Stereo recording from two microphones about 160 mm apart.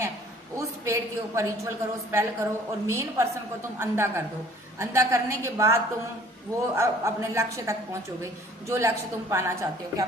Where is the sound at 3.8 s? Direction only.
15° right (ahead or behind).